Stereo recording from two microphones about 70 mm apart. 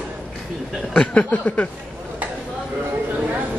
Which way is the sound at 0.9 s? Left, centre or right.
Centre.